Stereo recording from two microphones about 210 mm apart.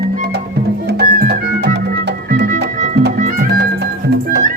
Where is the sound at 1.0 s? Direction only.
45° right (ahead or behind).